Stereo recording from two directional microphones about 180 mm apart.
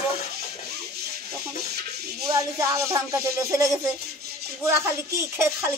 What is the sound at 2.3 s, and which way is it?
Speech, 15° right (ahead or behind).